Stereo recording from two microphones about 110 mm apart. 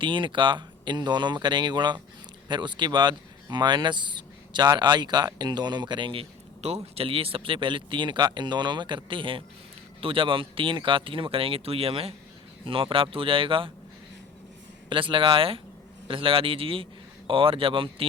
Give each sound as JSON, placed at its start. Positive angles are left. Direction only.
{"t": 0.0, "sound": "speech", "side_deg": -45}
{"t": 6.6, "sound": "speech", "side_deg": -70}
{"t": 14.8, "sound": "speech", "side_deg": -50}